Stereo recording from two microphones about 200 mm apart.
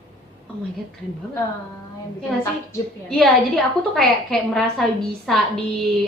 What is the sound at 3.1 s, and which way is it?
A woman's voice, centre (ahead or behind).